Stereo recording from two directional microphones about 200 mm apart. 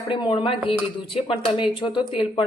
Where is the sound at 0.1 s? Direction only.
25° left (ahead or behind).